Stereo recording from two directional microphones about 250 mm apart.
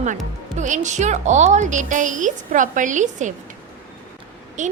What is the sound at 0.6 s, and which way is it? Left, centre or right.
Speech, right.